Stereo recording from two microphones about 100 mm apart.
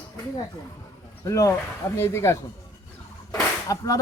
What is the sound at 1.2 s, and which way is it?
Speech, 30° left (ahead or behind).